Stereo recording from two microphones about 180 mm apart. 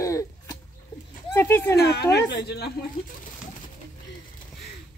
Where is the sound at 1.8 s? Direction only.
65° left (ahead or behind).